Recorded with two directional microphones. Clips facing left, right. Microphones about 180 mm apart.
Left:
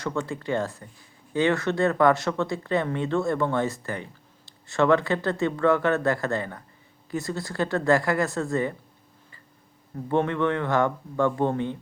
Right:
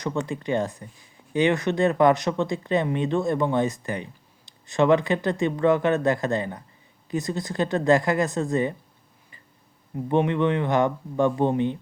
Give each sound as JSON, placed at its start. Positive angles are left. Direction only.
{"t": 0.0, "sound": "speech", "side_deg": -20}
{"t": 9.9, "sound": "speech", "side_deg": -15}